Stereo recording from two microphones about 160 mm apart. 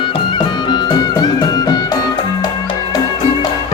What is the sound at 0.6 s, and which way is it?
Music, 25° left (ahead or behind).